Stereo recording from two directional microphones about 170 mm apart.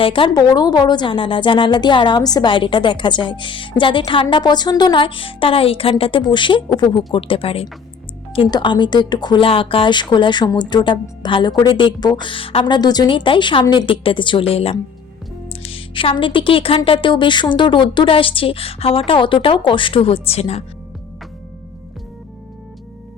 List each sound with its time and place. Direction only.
0.0 s a woman's voice: 30° left (ahead or behind)